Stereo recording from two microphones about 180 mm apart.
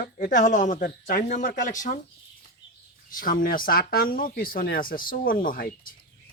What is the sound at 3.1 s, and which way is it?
Speech, 50° left (ahead or behind).